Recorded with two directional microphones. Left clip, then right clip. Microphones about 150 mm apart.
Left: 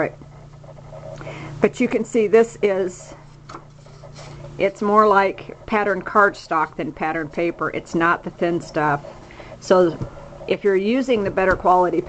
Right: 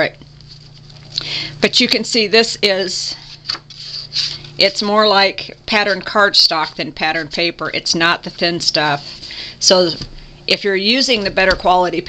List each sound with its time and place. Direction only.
1.1 s speech: 35° right (ahead or behind)
4.6 s a woman's voice: 30° right (ahead or behind)